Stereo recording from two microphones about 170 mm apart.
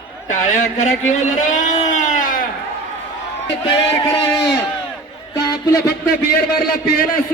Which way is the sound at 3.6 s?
30° left (ahead or behind).